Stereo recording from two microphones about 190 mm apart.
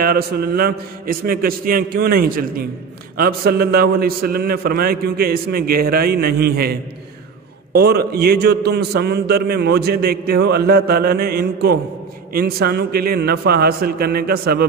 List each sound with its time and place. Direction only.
0.0 s a man's voice: 50° right (ahead or behind)